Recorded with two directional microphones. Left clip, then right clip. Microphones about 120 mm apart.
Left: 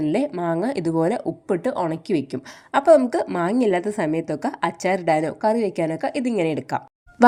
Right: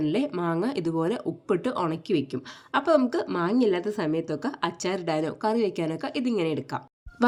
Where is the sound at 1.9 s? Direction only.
30° left (ahead or behind).